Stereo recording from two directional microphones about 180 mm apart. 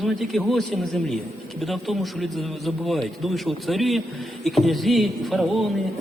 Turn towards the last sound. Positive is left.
turn(degrees=0)  # may be behind; listen again after turning